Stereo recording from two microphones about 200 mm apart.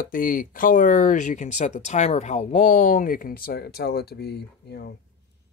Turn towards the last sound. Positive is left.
turn(degrees=55)  # may be behind; listen again after turning